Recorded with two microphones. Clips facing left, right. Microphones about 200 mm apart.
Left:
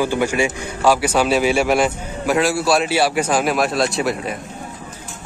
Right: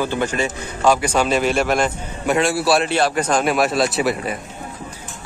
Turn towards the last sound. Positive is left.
turn(degrees=0)  # may be behind; listen again after turning